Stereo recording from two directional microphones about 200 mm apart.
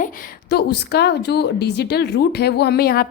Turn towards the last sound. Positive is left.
turn(degrees=50)  # may be behind; listen again after turning